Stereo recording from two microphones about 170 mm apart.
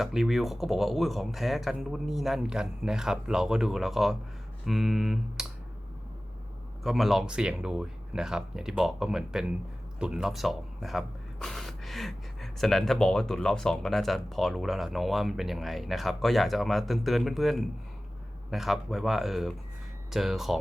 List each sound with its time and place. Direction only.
0.0 s speech: centre (ahead or behind)
6.8 s speech: centre (ahead or behind)